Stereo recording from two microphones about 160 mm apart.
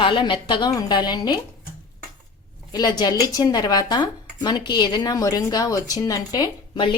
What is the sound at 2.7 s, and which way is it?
A woman's voice, 25° left (ahead or behind).